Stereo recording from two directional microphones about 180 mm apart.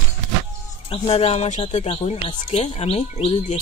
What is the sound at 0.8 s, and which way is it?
Speech, 35° left (ahead or behind).